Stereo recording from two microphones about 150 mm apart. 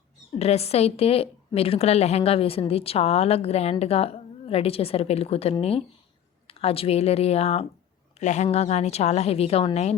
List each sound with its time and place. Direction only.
0.3 s a woman's voice: 45° left (ahead or behind)